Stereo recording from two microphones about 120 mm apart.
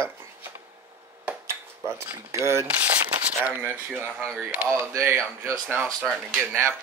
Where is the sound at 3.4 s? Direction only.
10° right (ahead or behind).